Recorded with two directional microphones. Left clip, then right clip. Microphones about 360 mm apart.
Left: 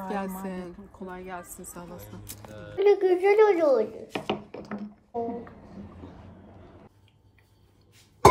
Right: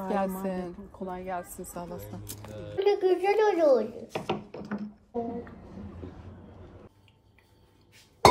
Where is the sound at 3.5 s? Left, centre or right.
Left.